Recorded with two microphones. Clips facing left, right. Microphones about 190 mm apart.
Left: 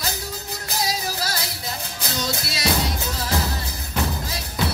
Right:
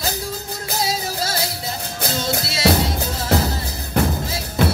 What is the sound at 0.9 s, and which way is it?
Music, 25° right (ahead or behind).